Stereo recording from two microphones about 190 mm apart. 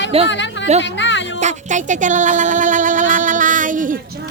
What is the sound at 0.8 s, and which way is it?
Music, 70° left (ahead or behind).